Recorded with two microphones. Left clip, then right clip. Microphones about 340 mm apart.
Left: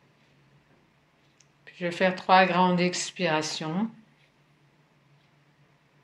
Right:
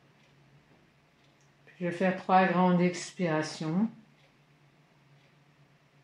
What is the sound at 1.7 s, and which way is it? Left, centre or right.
Speech, left.